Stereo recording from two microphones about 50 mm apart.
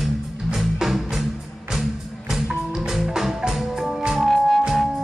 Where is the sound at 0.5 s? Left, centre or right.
Centre.